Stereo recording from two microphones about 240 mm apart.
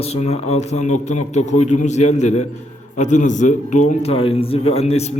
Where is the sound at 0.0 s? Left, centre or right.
Left.